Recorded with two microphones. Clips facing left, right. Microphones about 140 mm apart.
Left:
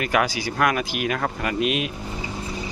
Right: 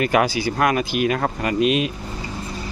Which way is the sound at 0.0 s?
35° right (ahead or behind).